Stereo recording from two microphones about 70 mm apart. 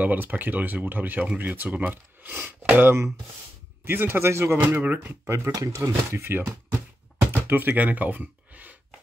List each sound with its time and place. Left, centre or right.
0.0 s speech: right
4.6 s speech: right
5.5 s speech: right
7.2 s a sound: right